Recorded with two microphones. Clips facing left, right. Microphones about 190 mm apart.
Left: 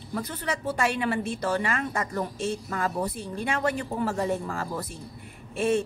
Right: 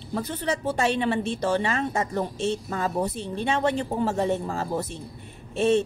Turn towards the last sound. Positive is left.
turn(degrees=-25)  # may be behind; listen again after turning